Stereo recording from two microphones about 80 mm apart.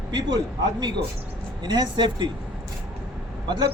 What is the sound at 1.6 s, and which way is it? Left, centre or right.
Speech, right.